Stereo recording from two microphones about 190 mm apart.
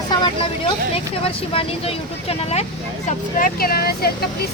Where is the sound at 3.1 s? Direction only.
50° left (ahead or behind).